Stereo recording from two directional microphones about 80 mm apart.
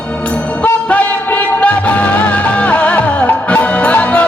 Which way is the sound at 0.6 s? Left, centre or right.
Centre.